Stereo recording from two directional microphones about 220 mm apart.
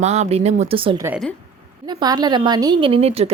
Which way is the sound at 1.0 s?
5° right (ahead or behind).